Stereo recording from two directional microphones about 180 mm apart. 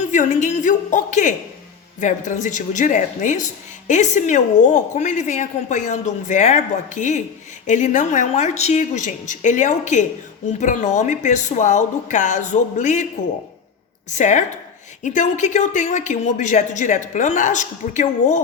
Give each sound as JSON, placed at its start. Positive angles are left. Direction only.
{"t": 0.1, "sound": "speech", "side_deg": 45}
{"t": 14.1, "sound": "speech", "side_deg": 40}